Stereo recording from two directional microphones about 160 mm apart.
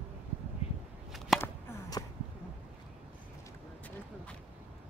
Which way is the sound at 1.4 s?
25° left (ahead or behind).